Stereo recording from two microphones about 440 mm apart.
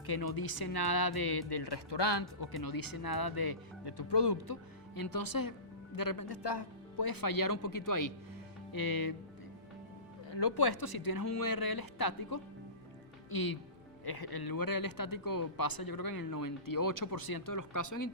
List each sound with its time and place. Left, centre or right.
0.0 s speech: left
4.9 s speech: left
10.2 s speech: left